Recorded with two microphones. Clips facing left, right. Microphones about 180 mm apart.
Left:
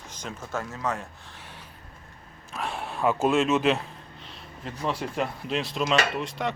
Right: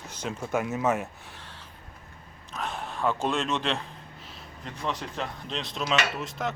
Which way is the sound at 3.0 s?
5° left (ahead or behind).